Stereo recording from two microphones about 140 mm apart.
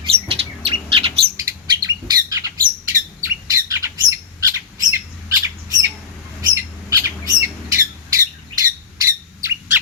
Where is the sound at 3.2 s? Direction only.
20° right (ahead or behind).